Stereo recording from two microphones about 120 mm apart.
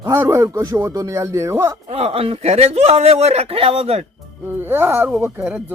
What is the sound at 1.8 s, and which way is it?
Speech, 60° right (ahead or behind).